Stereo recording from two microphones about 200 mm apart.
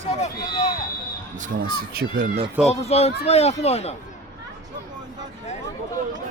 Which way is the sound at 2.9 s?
30° left (ahead or behind).